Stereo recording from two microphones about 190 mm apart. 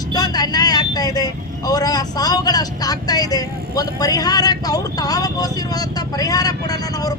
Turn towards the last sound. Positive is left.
turn(degrees=20)  # may be behind; listen again after turning